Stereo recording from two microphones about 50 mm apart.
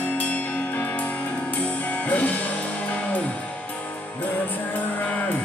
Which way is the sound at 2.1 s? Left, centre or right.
Left.